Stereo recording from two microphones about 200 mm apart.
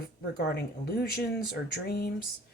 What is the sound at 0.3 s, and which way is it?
Speech, 50° left (ahead or behind).